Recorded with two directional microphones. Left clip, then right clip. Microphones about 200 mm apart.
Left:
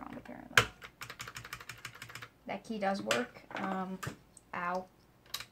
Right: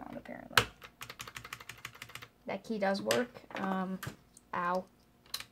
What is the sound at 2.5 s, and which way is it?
Speech, 50° right (ahead or behind).